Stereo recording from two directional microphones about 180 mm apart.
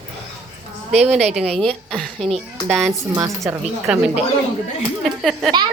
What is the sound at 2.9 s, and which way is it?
Speech, 15° right (ahead or behind).